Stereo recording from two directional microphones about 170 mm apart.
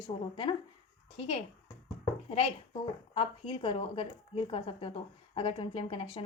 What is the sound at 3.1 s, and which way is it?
A woman's voice, 30° left (ahead or behind).